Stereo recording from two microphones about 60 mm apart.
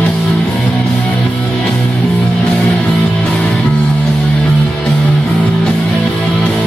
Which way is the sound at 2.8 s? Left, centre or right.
Centre.